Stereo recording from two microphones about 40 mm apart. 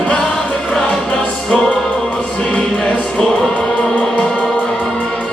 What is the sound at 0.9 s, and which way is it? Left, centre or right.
Music, left.